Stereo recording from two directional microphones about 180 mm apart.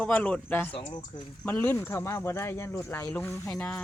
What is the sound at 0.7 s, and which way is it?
Speech, 25° left (ahead or behind).